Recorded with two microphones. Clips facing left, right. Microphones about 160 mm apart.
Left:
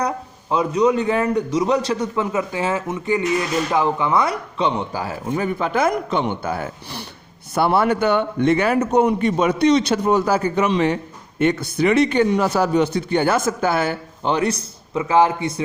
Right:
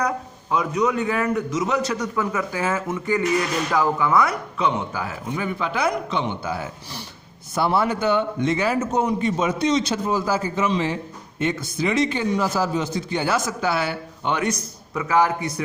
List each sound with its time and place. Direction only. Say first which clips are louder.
0.5 s a man's voice: left 4 dB; 30° left (ahead or behind); by 14.3 s 45° left (ahead or behind)
14.3 s a man's voice: left 4 dB; 30° left (ahead or behind)